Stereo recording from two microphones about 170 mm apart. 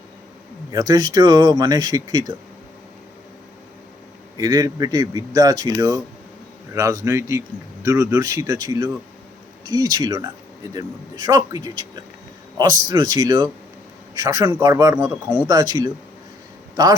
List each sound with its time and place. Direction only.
0.7 s a man's voice: 20° right (ahead or behind)
4.4 s a man's voice: 20° right (ahead or behind)